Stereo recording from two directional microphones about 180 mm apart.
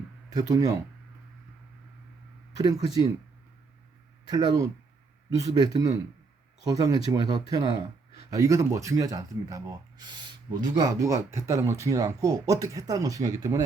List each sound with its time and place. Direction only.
0.3 s speech: 20° right (ahead or behind)
4.3 s speech: 25° right (ahead or behind)